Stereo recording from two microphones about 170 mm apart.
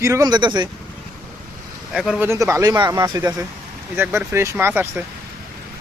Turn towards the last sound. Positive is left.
turn(degrees=-10)  # may be behind; listen again after turning